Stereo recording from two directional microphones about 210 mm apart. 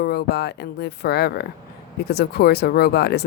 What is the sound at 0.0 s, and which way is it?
Speech, 50° left (ahead or behind).